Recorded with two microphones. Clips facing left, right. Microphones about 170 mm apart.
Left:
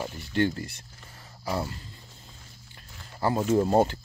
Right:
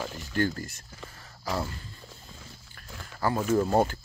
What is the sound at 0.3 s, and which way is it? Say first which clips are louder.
Speech: left 2 dB; 25° left (ahead or behind).